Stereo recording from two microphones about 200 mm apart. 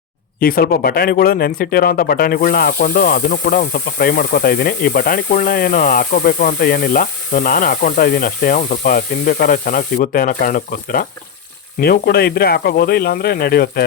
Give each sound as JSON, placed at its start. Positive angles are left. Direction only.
{"t": 0.3, "sound": "speech", "side_deg": 45}